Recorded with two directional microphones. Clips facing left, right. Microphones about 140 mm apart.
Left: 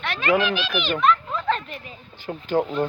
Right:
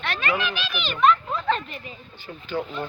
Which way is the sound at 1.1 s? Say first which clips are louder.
Even; centre (ahead or behind).